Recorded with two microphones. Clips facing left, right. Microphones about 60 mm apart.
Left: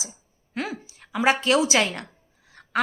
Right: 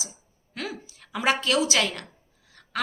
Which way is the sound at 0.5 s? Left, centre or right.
Left.